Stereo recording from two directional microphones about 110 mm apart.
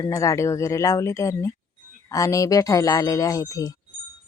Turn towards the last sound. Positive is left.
turn(degrees=30)  # may be behind; listen again after turning